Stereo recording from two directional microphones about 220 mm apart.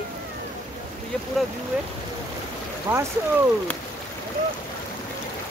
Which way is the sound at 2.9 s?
10° right (ahead or behind).